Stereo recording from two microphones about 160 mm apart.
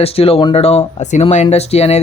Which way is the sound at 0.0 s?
35° left (ahead or behind).